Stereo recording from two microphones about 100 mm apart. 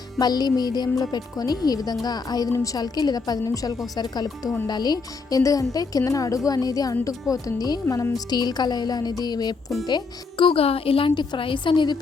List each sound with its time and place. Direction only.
0.2 s a woman's voice: 40° left (ahead or behind)